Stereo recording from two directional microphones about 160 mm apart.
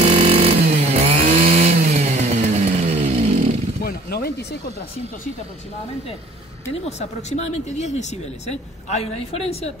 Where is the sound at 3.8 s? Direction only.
75° left (ahead or behind).